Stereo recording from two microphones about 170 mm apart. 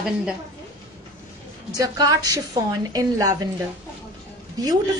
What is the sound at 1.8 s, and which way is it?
A woman's voice, 20° right (ahead or behind).